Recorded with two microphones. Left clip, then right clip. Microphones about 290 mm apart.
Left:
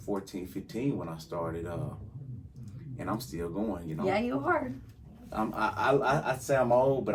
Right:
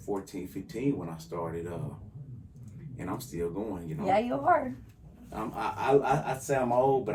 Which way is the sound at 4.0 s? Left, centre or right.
Centre.